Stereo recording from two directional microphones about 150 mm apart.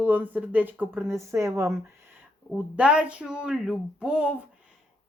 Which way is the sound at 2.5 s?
10° right (ahead or behind).